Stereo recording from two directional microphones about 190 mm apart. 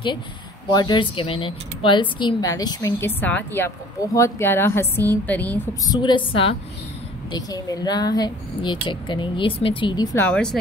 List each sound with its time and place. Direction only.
0.7 s speech: 25° left (ahead or behind)
5.9 s speech: 25° left (ahead or behind)
10.1 s a woman's voice: 5° left (ahead or behind)